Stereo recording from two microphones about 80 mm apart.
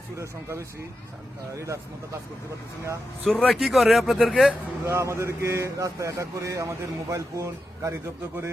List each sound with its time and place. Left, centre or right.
0.2 s a man's voice: right
3.2 s speech: centre
3.5 s speech: centre
4.9 s a man's voice: right